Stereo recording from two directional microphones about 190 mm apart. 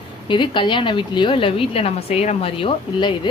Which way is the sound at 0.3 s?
25° left (ahead or behind).